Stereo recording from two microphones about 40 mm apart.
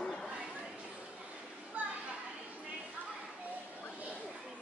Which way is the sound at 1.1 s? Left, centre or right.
Right.